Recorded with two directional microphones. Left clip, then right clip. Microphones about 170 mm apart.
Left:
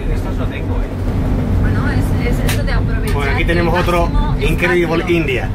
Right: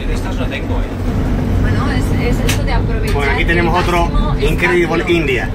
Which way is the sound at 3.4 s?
5° left (ahead or behind).